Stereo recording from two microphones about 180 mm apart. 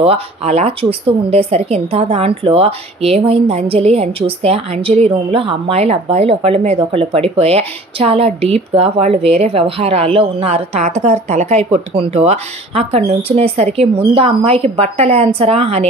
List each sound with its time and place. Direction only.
0.0 s speech: 35° right (ahead or behind)